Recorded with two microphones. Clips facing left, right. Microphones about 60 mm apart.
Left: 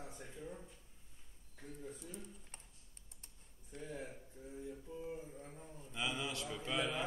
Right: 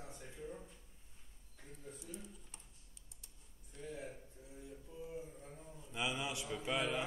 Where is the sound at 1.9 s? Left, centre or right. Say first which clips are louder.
Even; left.